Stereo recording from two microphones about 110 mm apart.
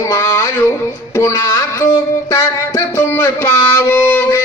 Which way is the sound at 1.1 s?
25° left (ahead or behind).